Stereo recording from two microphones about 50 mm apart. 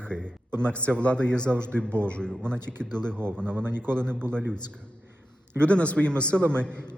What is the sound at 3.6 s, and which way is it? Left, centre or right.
Speech, right.